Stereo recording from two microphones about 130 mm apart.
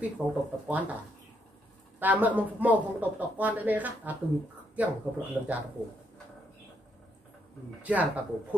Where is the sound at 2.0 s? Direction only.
10° right (ahead or behind).